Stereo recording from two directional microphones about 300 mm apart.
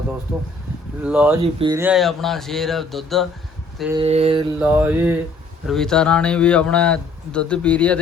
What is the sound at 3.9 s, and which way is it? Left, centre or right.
Mantra, right.